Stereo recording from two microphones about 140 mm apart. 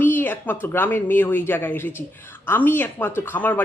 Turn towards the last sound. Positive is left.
turn(degrees=15)  # may be behind; listen again after turning